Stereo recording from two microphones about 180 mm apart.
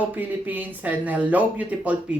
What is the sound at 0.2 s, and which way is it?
Speech, 10° right (ahead or behind).